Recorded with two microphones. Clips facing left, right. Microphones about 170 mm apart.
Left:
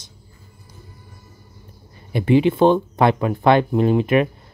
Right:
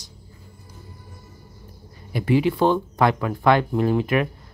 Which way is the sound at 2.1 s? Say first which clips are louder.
Left 4 dB; 25° left (ahead or behind).